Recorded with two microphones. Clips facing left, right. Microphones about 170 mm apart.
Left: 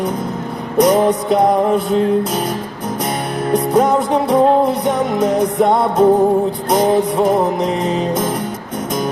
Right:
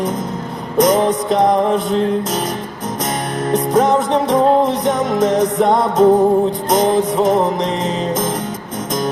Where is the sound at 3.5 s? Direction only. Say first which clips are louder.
Even; 10° left (ahead or behind).